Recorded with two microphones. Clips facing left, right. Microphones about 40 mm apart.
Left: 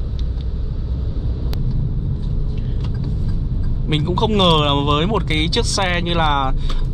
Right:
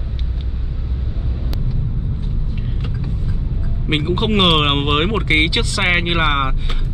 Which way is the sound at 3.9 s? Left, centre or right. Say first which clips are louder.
Even; right.